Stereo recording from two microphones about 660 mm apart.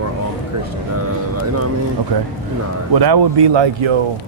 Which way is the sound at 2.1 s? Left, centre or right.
Right.